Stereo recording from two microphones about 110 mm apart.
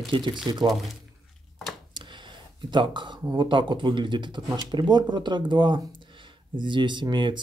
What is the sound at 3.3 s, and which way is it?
Speech, 45° right (ahead or behind).